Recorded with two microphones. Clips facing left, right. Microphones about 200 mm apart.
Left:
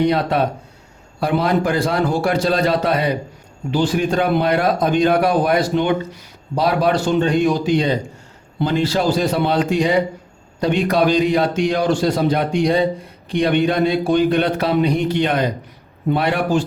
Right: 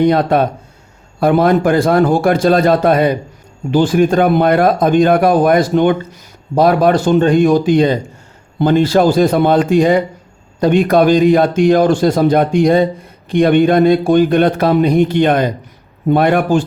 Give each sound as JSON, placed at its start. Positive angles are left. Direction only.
{"t": 0.0, "sound": "speech", "side_deg": -50}